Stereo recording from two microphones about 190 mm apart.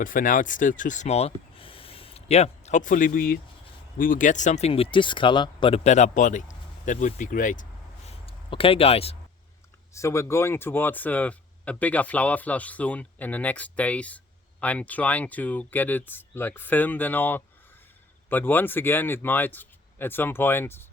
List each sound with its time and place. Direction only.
0.0 s speech: 45° left (ahead or behind)
8.3 s speech: 30° left (ahead or behind)
9.9 s speech: 15° left (ahead or behind)